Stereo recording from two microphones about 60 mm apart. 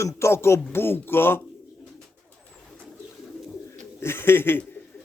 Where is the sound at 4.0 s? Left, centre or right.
Left.